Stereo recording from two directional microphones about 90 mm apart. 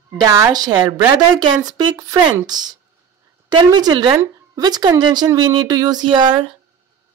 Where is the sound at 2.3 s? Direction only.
50° right (ahead or behind).